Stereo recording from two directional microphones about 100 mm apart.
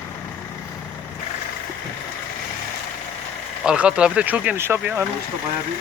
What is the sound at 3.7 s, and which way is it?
Speech, 10° right (ahead or behind).